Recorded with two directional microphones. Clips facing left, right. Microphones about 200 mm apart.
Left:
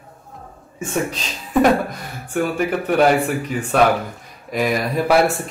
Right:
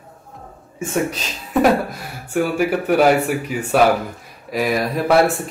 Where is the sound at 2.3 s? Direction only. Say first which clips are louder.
Right 2 dB; 5° right (ahead or behind).